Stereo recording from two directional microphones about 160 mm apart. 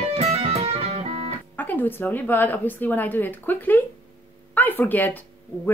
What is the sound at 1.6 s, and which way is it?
A woman's voice, 10° left (ahead or behind).